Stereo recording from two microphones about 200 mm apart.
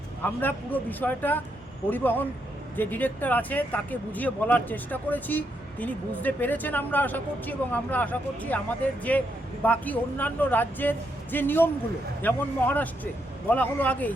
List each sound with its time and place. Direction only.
0.2 s speech: 10° left (ahead or behind)